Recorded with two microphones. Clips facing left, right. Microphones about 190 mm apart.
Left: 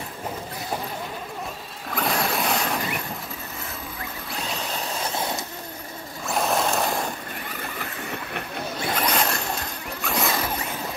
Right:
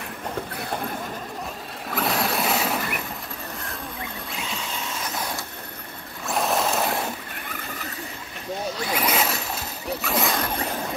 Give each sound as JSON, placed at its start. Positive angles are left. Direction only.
{"t": 1.9, "sound": "mechanisms", "side_deg": 0}
{"t": 4.7, "sound": "vehicle", "side_deg": 30}
{"t": 6.2, "sound": "a sound", "side_deg": 0}
{"t": 8.9, "sound": "zipper", "side_deg": -5}